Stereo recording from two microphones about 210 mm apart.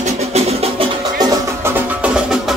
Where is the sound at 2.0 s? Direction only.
5° right (ahead or behind).